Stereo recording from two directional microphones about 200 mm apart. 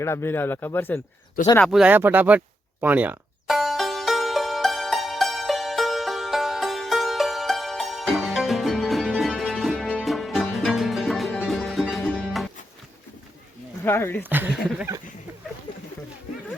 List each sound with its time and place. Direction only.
0.0 s speech: 15° left (ahead or behind)
1.6 s speech: 5° right (ahead or behind)
2.8 s music: 10° right (ahead or behind)
13.8 s speech: 10° left (ahead or behind)
14.3 s speech: 10° right (ahead or behind)